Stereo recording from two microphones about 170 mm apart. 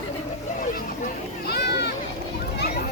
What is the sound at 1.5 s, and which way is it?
Children playing, 75° left (ahead or behind).